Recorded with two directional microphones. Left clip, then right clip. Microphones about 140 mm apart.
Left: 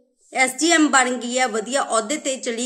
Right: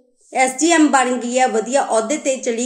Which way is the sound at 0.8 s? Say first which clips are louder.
Right 2 dB; 40° left (ahead or behind).